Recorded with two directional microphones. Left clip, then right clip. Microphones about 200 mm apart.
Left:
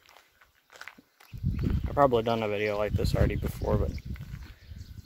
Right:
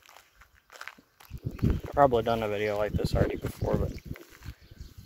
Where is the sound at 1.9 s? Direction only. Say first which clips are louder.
Right 1 dB; 10° left (ahead or behind).